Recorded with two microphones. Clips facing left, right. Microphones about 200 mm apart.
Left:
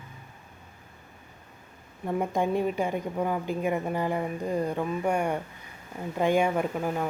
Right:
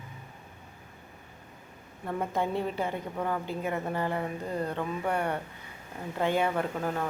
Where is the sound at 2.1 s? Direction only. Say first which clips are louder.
Left 4 dB; 15° left (ahead or behind).